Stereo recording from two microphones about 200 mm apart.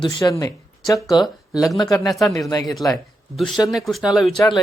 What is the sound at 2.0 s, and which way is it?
Speech, centre (ahead or behind).